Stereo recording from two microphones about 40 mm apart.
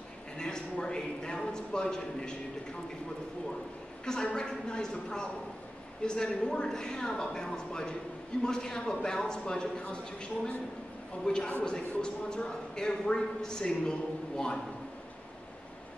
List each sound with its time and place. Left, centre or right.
0.4 s a man's voice: centre
4.0 s a woman's voice: centre
11.2 s a man's voice: left